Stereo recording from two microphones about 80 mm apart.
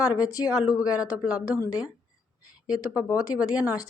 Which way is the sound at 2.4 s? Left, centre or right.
Left.